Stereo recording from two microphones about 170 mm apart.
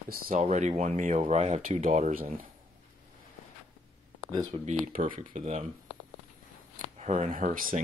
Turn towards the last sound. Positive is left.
turn(degrees=-50)  # may be behind; listen again after turning